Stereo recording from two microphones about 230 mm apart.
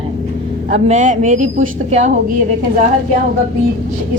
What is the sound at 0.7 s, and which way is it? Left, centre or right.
A woman's voice, right.